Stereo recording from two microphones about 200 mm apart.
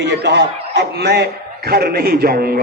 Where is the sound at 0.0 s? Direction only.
60° right (ahead or behind).